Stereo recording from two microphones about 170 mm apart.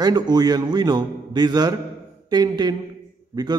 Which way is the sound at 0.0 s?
25° right (ahead or behind).